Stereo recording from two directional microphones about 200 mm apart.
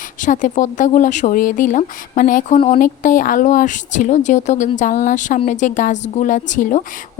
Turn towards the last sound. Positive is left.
turn(degrees=40)  # may be behind; listen again after turning